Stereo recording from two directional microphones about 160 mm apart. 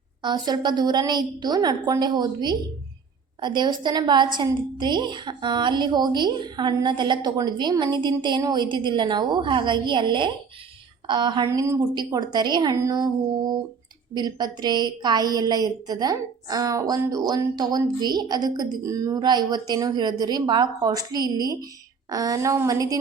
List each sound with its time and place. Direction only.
0.2 s a woman's voice: 25° right (ahead or behind)
14.1 s a woman's voice: 25° right (ahead or behind)